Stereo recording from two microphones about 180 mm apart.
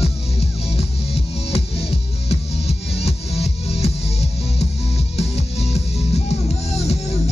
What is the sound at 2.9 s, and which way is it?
Music, 35° left (ahead or behind).